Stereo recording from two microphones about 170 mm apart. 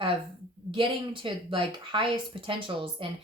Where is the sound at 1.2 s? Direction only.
30° right (ahead or behind).